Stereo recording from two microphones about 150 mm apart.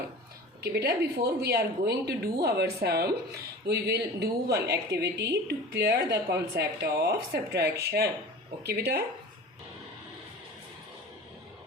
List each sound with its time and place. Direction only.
0.6 s a woman's voice: 90° right